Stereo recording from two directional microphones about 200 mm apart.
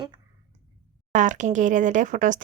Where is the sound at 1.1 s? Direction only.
40° right (ahead or behind).